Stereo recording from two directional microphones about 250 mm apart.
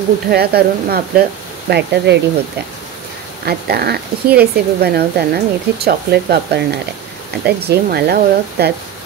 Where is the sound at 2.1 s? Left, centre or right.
Right.